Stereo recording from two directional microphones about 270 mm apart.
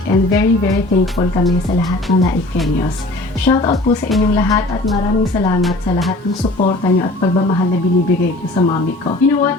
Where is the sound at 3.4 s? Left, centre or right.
Centre.